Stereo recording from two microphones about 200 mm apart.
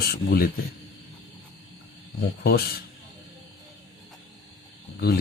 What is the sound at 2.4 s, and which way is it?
Speech, 50° left (ahead or behind).